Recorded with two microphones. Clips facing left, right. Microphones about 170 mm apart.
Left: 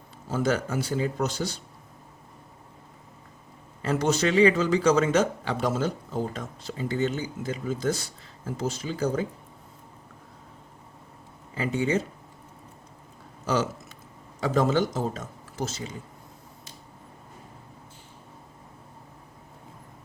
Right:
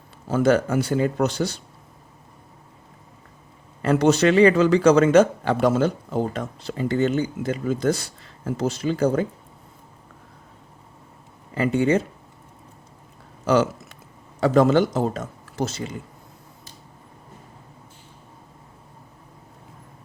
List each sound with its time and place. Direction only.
0.3 s speech: 60° right (ahead or behind)
3.8 s speech: 65° right (ahead or behind)
11.5 s speech: 65° right (ahead or behind)
14.4 s speech: 70° right (ahead or behind)